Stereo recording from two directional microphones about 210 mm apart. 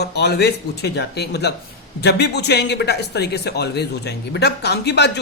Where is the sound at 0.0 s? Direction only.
50° left (ahead or behind).